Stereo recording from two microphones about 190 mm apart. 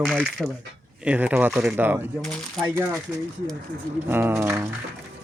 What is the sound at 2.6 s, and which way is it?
Speech, 10° right (ahead or behind).